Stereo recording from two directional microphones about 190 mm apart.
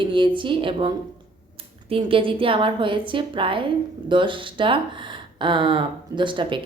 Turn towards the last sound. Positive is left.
turn(degrees=-25)  # may be behind; listen again after turning